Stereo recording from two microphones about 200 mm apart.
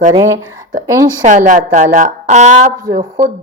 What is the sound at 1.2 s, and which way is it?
A woman's voice, 40° right (ahead or behind).